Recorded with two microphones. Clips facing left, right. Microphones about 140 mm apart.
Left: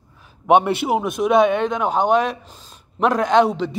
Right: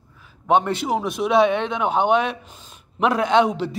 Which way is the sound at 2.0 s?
40° left (ahead or behind).